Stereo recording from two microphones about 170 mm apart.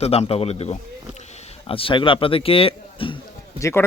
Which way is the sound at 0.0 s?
35° left (ahead or behind).